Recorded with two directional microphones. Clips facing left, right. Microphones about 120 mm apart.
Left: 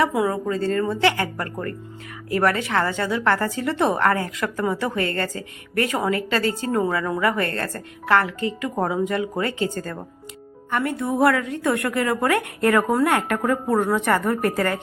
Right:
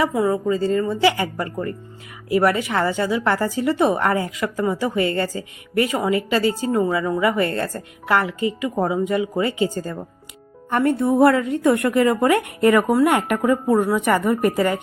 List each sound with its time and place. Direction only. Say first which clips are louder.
0.3 s speech: right 3 dB; 5° right (ahead or behind)
3.9 s speech: even; 15° right (ahead or behind)
4.4 s speech: right 2 dB; 5° right (ahead or behind)
10.7 s a woman's voice: right 5 dB; 35° right (ahead or behind); by 14.8 s 15° right (ahead or behind)